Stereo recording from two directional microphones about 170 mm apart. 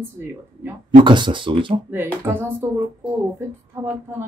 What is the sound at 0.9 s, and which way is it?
Speech, 30° right (ahead or behind).